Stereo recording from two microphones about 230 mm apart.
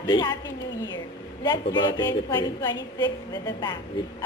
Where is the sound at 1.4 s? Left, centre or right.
Centre.